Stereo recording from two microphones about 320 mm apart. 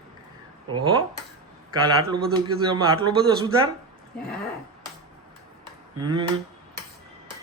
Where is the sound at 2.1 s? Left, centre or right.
Centre.